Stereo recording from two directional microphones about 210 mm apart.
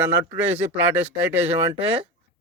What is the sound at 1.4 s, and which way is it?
Speech, 30° right (ahead or behind).